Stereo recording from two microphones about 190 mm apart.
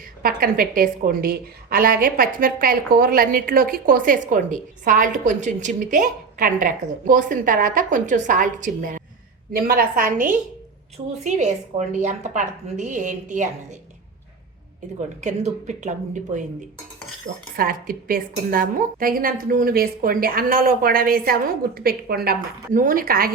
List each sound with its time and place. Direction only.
0.2 s a woman's voice: 50° right (ahead or behind)
15.2 s a woman's voice: 40° right (ahead or behind)
17.6 s a woman's voice: 50° right (ahead or behind)